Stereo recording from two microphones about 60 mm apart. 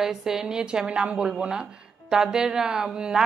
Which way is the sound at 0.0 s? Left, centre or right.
Centre.